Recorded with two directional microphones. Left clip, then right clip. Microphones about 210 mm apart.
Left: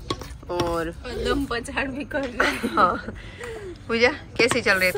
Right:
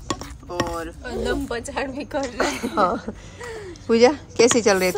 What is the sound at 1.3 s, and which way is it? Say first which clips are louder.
Speech: left 2 dB; 55° right (ahead or behind).